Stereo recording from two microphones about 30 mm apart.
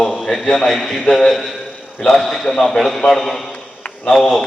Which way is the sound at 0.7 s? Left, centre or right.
Centre.